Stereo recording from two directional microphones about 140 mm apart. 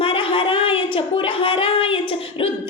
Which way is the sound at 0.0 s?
40° left (ahead or behind).